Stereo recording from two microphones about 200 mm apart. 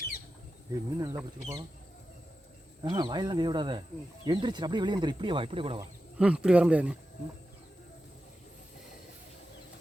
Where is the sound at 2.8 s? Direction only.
20° right (ahead or behind).